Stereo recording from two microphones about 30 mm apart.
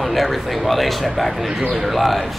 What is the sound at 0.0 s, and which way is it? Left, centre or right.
A man's voice, centre.